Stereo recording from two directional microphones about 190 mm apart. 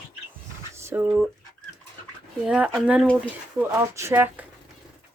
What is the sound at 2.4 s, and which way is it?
Speech, 5° right (ahead or behind).